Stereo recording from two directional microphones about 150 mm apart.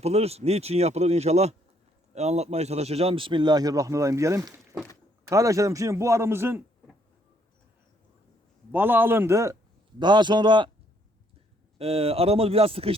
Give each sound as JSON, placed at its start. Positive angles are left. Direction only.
{"t": 0.0, "sound": "a man's voice", "side_deg": -45}
{"t": 8.7, "sound": "a man's voice", "side_deg": -15}
{"t": 10.0, "sound": "speech", "side_deg": -30}
{"t": 11.8, "sound": "speech", "side_deg": -40}